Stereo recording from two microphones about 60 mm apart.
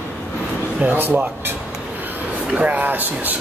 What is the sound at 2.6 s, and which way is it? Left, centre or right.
Speech, right.